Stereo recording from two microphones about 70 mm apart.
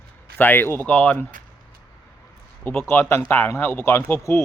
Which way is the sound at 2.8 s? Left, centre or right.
Left.